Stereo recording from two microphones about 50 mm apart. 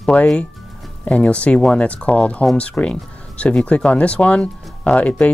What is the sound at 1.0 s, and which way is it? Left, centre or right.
Speech, left.